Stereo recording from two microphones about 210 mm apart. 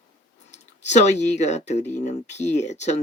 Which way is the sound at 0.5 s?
35° left (ahead or behind).